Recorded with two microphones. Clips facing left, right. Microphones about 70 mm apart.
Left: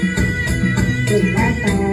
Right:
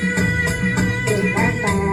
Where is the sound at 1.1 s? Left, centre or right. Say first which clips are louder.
Left 5 dB; right.